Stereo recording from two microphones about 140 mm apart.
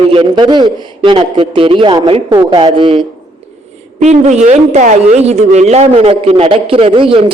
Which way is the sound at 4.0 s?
55° right (ahead or behind).